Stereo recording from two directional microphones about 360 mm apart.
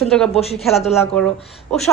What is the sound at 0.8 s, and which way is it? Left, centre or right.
A woman's voice, centre.